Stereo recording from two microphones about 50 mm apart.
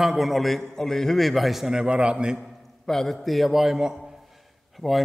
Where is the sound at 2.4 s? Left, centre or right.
Centre.